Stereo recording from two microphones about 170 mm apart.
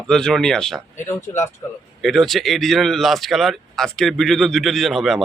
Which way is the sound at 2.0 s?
Centre (ahead or behind).